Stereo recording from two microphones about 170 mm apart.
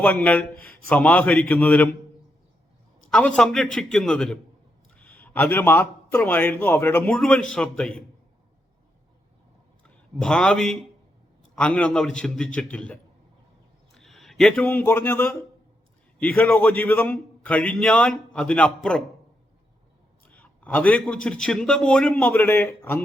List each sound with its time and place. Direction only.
0.0 s a man's voice: 5° left (ahead or behind)
3.1 s a man's voice: 5° left (ahead or behind)
10.2 s a man's voice: 5° left (ahead or behind)
20.2 s a man's voice: 10° left (ahead or behind)